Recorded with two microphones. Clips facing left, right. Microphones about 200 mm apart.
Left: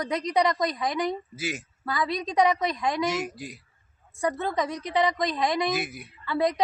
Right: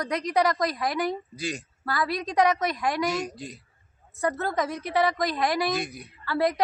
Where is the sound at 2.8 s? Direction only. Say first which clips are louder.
Even; 25° left (ahead or behind).